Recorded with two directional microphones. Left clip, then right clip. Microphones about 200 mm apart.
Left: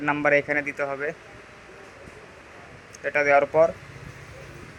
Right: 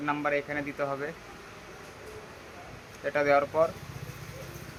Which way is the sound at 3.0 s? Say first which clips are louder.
Left 5 dB; 20° left (ahead or behind).